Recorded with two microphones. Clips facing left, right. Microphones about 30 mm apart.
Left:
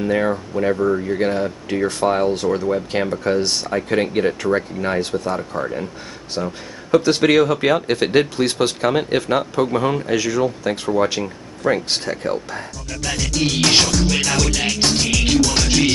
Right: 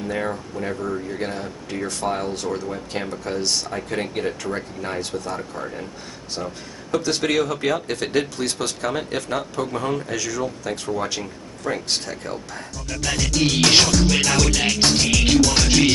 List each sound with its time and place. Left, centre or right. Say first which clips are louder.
0.1 s speech: left 6 dB; left
12.7 s music: right 2 dB; centre